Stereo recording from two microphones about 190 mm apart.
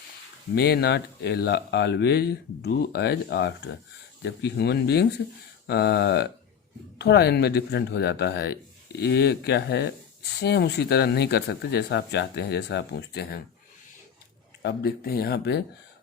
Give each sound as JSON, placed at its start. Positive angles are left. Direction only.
{"t": 0.5, "sound": "speech", "side_deg": 60}
{"t": 14.6, "sound": "speech", "side_deg": 60}